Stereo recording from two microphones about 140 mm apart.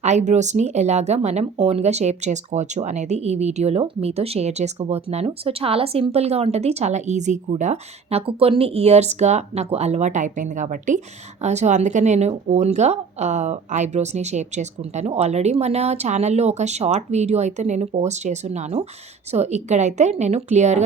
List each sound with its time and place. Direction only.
0.0 s speech: 55° right (ahead or behind)